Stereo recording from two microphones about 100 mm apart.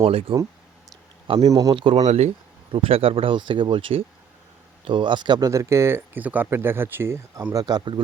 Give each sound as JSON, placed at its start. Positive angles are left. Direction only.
{"t": 0.0, "sound": "speech", "side_deg": -75}
{"t": 1.5, "sound": "speech", "side_deg": -35}
{"t": 1.7, "sound": "speech", "side_deg": -60}
{"t": 2.7, "sound": "speech", "side_deg": -70}
{"t": 5.5, "sound": "speech", "side_deg": -30}
{"t": 7.5, "sound": "speech", "side_deg": -40}